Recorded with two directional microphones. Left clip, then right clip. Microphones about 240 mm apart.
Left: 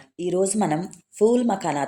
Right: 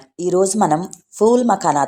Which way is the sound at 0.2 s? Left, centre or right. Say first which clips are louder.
Right 7 dB; centre.